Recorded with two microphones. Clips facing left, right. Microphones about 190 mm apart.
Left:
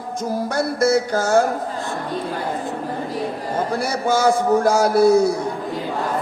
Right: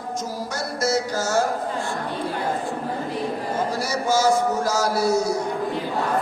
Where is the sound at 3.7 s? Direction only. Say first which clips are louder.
Left 4 dB; 55° left (ahead or behind).